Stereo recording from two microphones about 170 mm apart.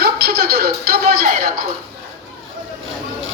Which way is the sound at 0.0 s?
65° right (ahead or behind).